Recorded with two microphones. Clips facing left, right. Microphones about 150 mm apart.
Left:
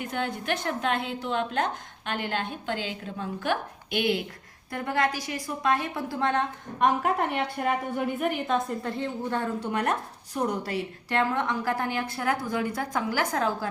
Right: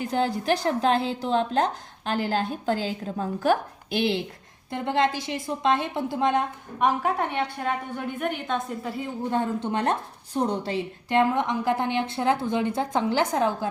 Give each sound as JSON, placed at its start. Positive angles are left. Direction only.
{"t": 0.0, "sound": "a woman's voice", "side_deg": -30}
{"t": 6.7, "sound": "a woman's voice", "side_deg": 0}
{"t": 9.3, "sound": "a woman's voice", "side_deg": -20}